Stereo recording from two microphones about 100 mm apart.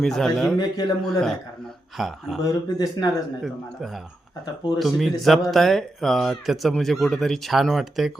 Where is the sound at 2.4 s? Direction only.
40° left (ahead or behind).